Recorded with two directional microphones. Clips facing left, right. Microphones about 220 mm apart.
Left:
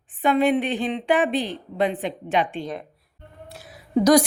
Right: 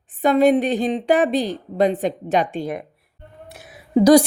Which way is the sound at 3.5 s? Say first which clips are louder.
Right 1 dB; 20° right (ahead or behind).